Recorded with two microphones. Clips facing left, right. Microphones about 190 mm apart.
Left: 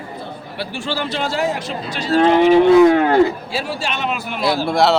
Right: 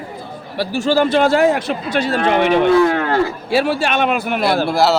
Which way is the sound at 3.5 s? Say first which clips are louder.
Right 7 dB; 65° right (ahead or behind).